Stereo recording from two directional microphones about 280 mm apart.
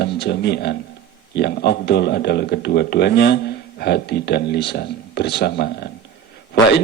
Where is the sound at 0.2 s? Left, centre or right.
Left.